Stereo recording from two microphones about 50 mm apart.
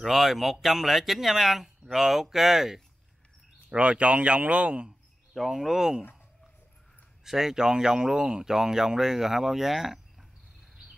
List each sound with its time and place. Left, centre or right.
0.0 s speech: centre
3.7 s speech: right
5.3 s speech: centre
7.2 s speech: centre